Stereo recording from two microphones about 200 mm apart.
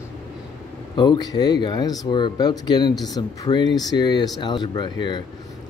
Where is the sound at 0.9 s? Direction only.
20° left (ahead or behind).